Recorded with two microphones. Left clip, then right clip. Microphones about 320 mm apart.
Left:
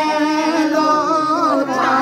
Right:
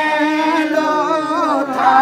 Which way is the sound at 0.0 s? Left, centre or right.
Right.